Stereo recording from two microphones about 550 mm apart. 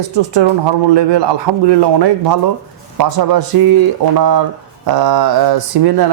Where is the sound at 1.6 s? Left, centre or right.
Right.